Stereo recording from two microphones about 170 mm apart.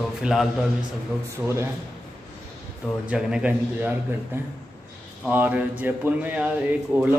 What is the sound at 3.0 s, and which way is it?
A man's voice, 5° right (ahead or behind).